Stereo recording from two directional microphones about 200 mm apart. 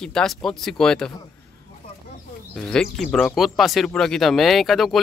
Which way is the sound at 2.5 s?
5° left (ahead or behind).